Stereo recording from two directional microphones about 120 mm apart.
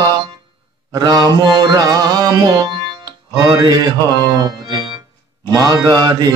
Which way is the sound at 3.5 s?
30° right (ahead or behind).